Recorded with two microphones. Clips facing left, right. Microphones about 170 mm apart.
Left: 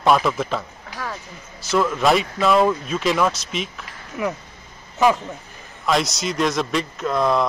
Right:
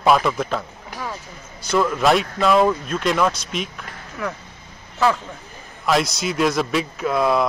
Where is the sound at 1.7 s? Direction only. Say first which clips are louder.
Even; centre (ahead or behind).